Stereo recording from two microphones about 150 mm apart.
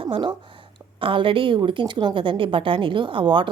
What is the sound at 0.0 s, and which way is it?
A woman's voice, 35° right (ahead or behind).